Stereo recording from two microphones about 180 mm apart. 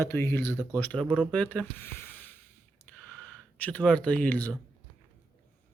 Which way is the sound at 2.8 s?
10° left (ahead or behind).